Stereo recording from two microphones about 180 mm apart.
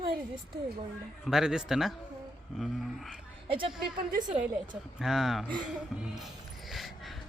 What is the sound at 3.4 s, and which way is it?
A woman's voice, 30° right (ahead or behind).